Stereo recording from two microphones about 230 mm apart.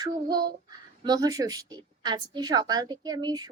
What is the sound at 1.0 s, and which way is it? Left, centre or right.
A woman's voice, centre.